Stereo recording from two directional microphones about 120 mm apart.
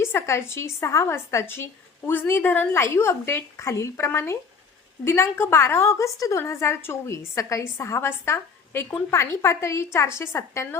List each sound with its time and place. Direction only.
0.0 s a woman's voice: 20° left (ahead or behind)